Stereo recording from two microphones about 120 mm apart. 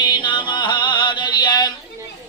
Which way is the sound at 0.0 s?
40° left (ahead or behind).